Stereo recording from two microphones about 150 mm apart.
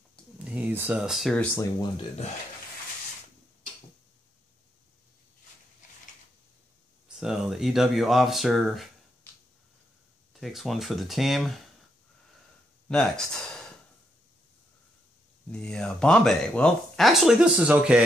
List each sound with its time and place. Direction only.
0.4 s speech: 10° right (ahead or behind)
1.5 s speech: 25° left (ahead or behind)
7.2 s speech: 5° right (ahead or behind)
9.3 s a sound: 15° left (ahead or behind)
10.3 s speech: centre (ahead or behind)
12.8 s speech: 5° left (ahead or behind)
15.5 s speech: 5° left (ahead or behind)